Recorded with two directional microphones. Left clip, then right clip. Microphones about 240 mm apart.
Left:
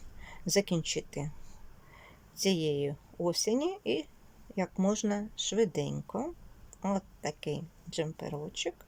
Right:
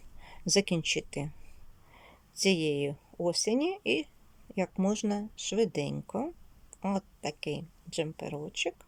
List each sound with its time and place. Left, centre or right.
0.2 s speech: centre